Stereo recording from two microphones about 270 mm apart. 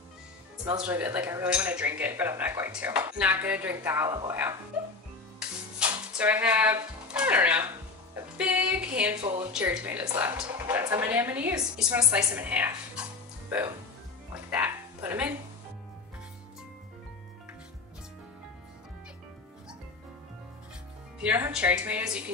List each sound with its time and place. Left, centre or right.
0.7 s speech: centre
5.4 s music: centre
9.2 s a woman's voice: centre
9.5 s speech: centre
14.5 s a sound: centre
21.2 s a woman's voice: centre